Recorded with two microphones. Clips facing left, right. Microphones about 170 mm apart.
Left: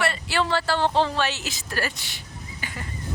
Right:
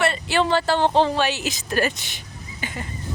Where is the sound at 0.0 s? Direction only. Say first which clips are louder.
Right 4 dB; 20° right (ahead or behind).